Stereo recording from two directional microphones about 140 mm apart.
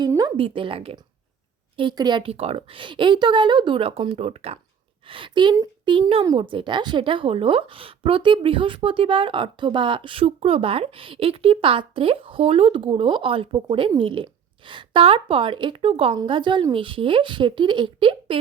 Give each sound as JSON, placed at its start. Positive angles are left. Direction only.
{"t": 0.1, "sound": "a woman's voice", "side_deg": -30}